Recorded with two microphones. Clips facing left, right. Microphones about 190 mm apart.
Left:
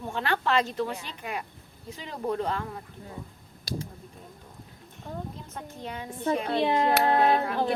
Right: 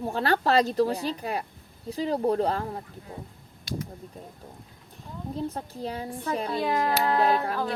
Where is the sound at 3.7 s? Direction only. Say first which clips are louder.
Right 1 dB; 35° left (ahead or behind).